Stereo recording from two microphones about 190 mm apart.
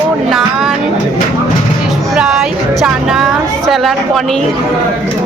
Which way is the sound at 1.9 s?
5° right (ahead or behind).